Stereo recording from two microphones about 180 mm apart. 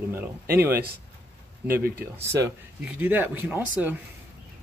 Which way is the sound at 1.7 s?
55° right (ahead or behind).